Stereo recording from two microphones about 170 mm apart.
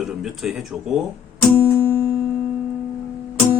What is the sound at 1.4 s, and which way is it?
Music, 10° left (ahead or behind).